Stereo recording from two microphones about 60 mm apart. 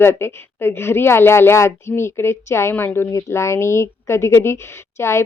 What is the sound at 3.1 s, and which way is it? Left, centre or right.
A woman's voice, left.